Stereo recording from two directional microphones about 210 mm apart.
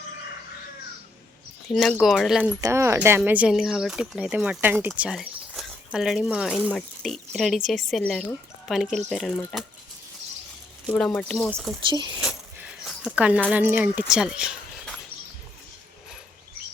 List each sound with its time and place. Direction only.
1.7 s speech: centre (ahead or behind)
2.6 s speech: 10° right (ahead or behind); by 9.6 s 5° left (ahead or behind)
10.8 s speech: 5° left (ahead or behind)
11.9 s speech: 20° right (ahead or behind)
12.2 s a sound: 5° right (ahead or behind)
13.1 s speech: 5° right (ahead or behind)